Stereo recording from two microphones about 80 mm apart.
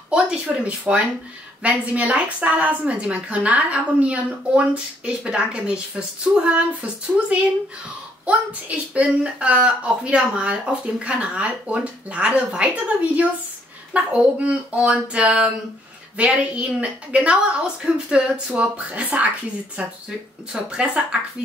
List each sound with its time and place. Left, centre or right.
0.1 s a woman's voice: centre